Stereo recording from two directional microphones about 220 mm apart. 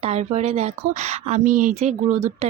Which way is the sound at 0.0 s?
30° right (ahead or behind).